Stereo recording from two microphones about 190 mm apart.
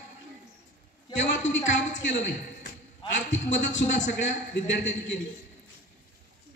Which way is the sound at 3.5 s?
75° left (ahead or behind).